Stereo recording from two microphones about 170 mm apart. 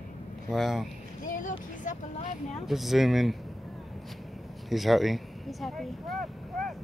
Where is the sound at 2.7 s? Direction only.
Centre (ahead or behind).